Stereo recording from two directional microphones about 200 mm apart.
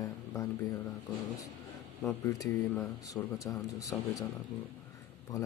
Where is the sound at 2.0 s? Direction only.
15° left (ahead or behind).